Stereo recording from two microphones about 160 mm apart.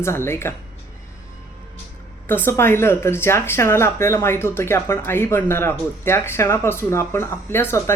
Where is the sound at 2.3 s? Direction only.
15° left (ahead or behind).